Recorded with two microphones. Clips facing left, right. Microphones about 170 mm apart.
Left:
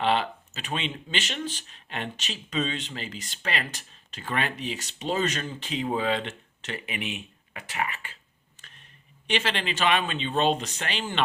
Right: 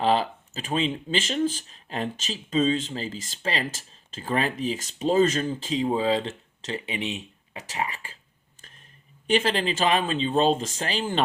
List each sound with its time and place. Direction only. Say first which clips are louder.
0.0 s speech: right 2 dB; 35° right (ahead or behind)
8.6 s a sound: right 1 dB; 40° right (ahead or behind)
9.3 s speech: right 5 dB; 40° right (ahead or behind)